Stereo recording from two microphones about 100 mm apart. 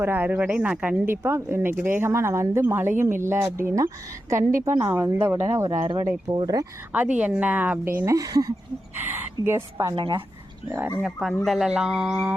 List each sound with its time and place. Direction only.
0.0 s a woman's voice: 20° right (ahead or behind)
6.3 s a woman's voice: 40° right (ahead or behind)
6.9 s speech: 15° right (ahead or behind)
8.0 s a woman's voice: 35° right (ahead or behind)
9.0 s speech: 20° right (ahead or behind)
10.7 s speech: 20° right (ahead or behind)
11.0 s a sound: centre (ahead or behind)